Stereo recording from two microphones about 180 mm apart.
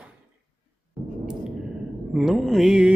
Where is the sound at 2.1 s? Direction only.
Centre (ahead or behind).